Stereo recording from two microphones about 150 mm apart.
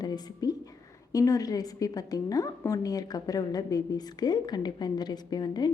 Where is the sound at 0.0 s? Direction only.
25° left (ahead or behind).